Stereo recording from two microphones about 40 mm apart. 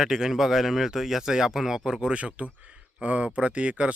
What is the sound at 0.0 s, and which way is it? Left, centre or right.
Speech, centre.